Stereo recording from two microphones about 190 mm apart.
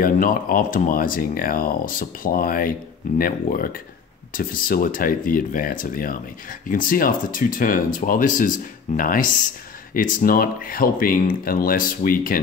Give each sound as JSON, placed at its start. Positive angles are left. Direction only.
{"t": 0.0, "sound": "speech", "side_deg": 45}